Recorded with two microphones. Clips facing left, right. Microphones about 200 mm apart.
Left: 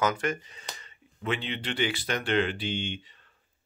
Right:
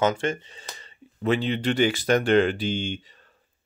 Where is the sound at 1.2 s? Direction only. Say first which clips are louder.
Right 8 dB; 40° right (ahead or behind).